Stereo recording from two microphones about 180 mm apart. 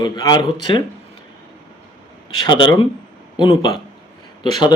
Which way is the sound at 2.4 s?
25° left (ahead or behind).